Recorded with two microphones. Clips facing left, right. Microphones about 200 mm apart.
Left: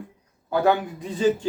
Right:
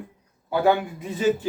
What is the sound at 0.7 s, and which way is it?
Speech, 15° right (ahead or behind).